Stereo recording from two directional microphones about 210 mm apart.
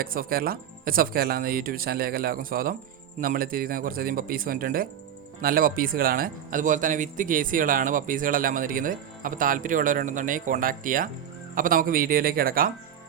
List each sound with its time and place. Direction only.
0.0 s speech: 45° right (ahead or behind)